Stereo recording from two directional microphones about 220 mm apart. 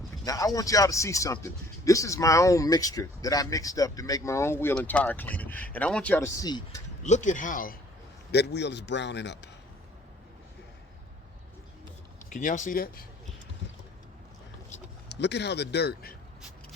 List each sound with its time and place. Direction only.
0.3 s speech: 15° left (ahead or behind)
7.0 s a man's voice: 35° left (ahead or behind); by 9.5 s 50° left (ahead or behind)
12.3 s speech: 35° left (ahead or behind)
15.1 s a man's voice: 50° left (ahead or behind)